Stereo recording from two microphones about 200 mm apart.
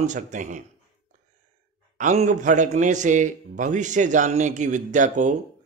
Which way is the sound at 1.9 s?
35° right (ahead or behind).